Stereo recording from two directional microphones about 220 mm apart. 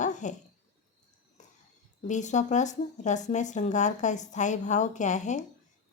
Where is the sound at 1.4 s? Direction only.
35° left (ahead or behind).